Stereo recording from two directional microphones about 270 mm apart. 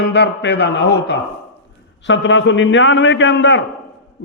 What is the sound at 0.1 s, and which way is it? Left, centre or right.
A man's voice, left.